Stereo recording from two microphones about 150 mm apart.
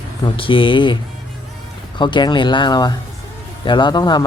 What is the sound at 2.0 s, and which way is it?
Speech, 30° left (ahead or behind).